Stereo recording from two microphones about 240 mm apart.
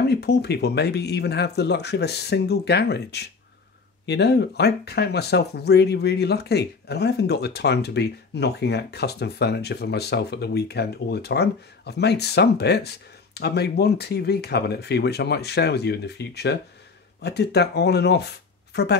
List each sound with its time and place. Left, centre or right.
0.1 s speech: left